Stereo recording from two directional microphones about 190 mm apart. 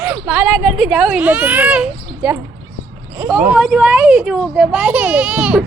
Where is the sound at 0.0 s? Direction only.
5° right (ahead or behind).